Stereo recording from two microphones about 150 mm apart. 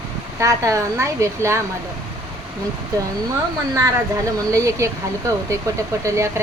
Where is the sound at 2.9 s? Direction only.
25° right (ahead or behind).